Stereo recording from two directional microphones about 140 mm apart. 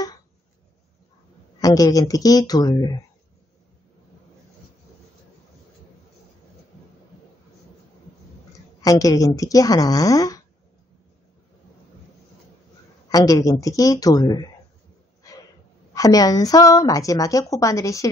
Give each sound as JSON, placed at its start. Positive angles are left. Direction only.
{"t": 1.6, "sound": "a woman's voice", "side_deg": 25}
{"t": 8.8, "sound": "a woman's voice", "side_deg": 25}
{"t": 13.1, "sound": "a woman's voice", "side_deg": 25}
{"t": 15.9, "sound": "a woman's voice", "side_deg": 25}